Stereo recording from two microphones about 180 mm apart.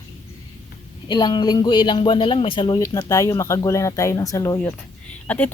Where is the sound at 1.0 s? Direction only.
25° left (ahead or behind).